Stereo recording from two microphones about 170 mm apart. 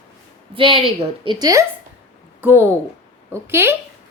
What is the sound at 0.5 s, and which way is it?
A woman's voice, 30° right (ahead or behind).